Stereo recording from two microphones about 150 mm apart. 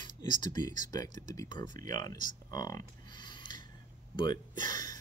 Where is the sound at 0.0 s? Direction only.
30° left (ahead or behind).